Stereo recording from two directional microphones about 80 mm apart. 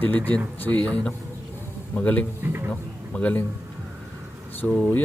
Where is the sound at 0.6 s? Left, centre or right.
Left.